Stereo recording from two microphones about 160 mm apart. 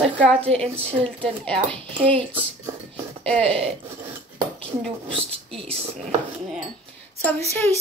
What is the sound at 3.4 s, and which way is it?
Speech, 35° right (ahead or behind).